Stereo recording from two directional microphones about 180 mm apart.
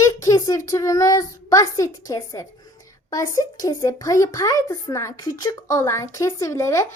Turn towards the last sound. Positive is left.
turn(degrees=15)  # may be behind; listen again after turning